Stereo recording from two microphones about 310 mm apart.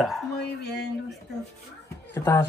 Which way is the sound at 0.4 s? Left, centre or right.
Left.